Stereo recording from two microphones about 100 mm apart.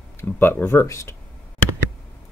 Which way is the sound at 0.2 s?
20° left (ahead or behind).